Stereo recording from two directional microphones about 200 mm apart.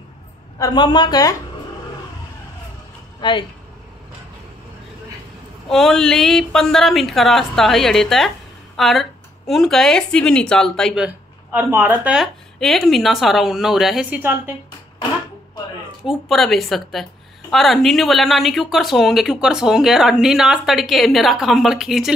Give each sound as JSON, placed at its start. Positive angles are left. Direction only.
{"t": 0.6, "sound": "a man's voice", "side_deg": 20}
{"t": 3.2, "sound": "speech", "side_deg": 25}
{"t": 5.7, "sound": "a woman's voice", "side_deg": 0}
{"t": 11.5, "sound": "a woman's voice", "side_deg": -10}
{"t": 16.0, "sound": "a woman's voice", "side_deg": 0}